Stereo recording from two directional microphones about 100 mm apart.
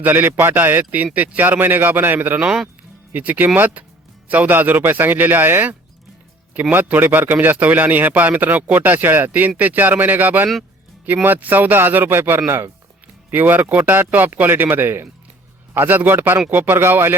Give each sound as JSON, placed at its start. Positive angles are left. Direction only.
{"t": 0.0, "sound": "a man's voice", "side_deg": -20}